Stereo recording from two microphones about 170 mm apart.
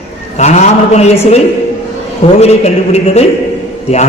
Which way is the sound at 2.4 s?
40° left (ahead or behind).